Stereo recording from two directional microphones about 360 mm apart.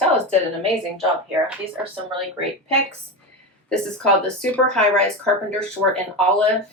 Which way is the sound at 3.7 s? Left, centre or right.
Centre.